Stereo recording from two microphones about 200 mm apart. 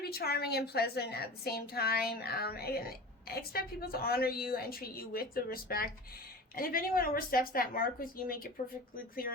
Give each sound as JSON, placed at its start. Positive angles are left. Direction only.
{"t": 0.0, "sound": "a woman's voice", "side_deg": 50}